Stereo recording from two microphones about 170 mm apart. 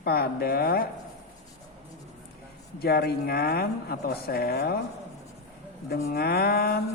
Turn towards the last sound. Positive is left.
turn(degrees=65)  # may be behind; listen again after turning